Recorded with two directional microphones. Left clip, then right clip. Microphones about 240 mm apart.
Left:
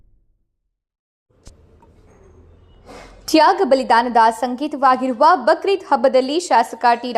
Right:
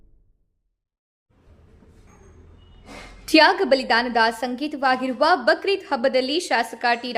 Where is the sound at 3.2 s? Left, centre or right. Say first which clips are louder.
Left 2 dB; centre.